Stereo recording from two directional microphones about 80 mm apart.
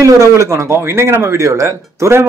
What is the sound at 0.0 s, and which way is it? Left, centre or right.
Speech, right.